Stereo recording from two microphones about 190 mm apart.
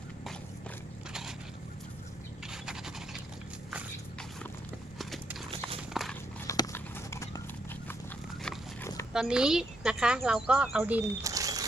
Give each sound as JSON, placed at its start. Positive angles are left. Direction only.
{"t": 2.5, "sound": "scratch", "side_deg": -5}
{"t": 3.7, "sound": "walk", "side_deg": -5}
{"t": 4.9, "sound": "clip-clop", "side_deg": 0}
{"t": 5.9, "sound": "horse", "side_deg": 0}
{"t": 6.5, "sound": "a sound", "side_deg": 15}
{"t": 8.4, "sound": "pig", "side_deg": 5}
{"t": 9.1, "sound": "speech", "side_deg": -5}